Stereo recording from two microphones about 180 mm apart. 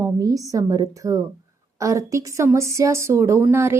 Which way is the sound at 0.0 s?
20° right (ahead or behind).